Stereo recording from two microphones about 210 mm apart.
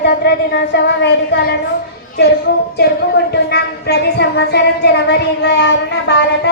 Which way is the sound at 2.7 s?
50° left (ahead or behind).